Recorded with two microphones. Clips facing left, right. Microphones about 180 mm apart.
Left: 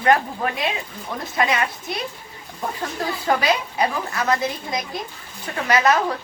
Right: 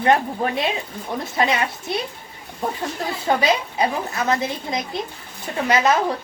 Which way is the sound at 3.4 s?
25° right (ahead or behind).